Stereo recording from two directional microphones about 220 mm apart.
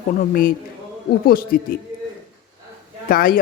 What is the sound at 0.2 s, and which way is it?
Speech, 40° left (ahead or behind).